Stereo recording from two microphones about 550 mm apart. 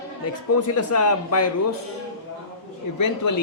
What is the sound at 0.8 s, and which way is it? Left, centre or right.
Speech, left.